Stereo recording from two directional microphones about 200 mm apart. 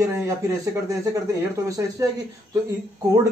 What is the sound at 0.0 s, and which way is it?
Speech, 15° right (ahead or behind).